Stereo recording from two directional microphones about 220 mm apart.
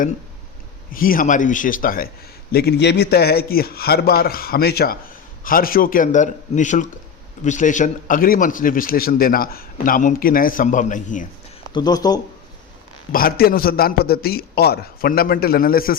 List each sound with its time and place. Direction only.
0.9 s a man's voice: 40° left (ahead or behind)
11.7 s speech: 20° left (ahead or behind)
13.1 s a man's voice: 40° left (ahead or behind)